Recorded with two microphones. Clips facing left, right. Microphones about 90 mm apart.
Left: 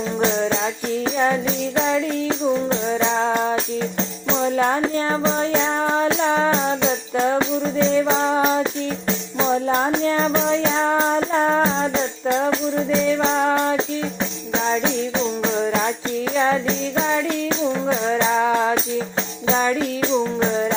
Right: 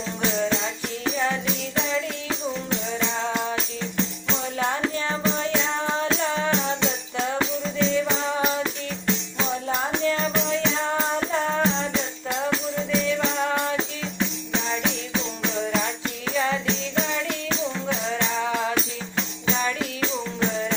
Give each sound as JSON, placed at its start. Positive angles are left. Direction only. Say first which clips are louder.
{"t": 0.2, "sound": "music", "louder": "left 4 dB", "side_deg": 35}
{"t": 3.0, "sound": "music", "louder": "left 6 dB", "side_deg": 55}
{"t": 4.8, "sound": "music", "louder": "left 5 dB", "side_deg": 30}
{"t": 5.5, "sound": "music", "louder": "left 5 dB", "side_deg": 45}
{"t": 11.6, "sound": "music", "louder": "left 5 dB", "side_deg": 40}
{"t": 16.3, "sound": "music", "louder": "left 5 dB", "side_deg": 50}
{"t": 16.6, "sound": "jingle bell", "louder": "left 5 dB", "side_deg": 45}
{"t": 17.5, "sound": "music", "louder": "left 6 dB", "side_deg": 40}
{"t": 18.5, "sound": "music", "louder": "left 6 dB", "side_deg": 35}